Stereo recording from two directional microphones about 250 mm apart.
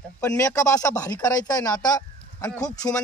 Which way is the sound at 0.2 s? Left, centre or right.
Centre.